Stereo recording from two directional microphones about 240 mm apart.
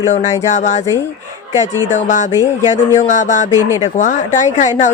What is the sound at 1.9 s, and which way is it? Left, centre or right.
Speech, left.